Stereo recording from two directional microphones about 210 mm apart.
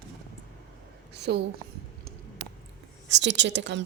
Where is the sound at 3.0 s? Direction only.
55° right (ahead or behind).